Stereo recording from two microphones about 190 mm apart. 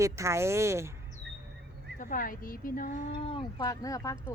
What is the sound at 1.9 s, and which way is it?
Speech, 45° left (ahead or behind).